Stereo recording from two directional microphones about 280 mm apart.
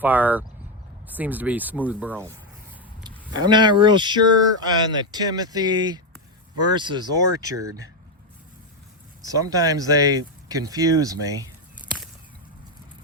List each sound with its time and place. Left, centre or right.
0.0 s speech: centre
3.0 s speech: centre
9.2 s speech: centre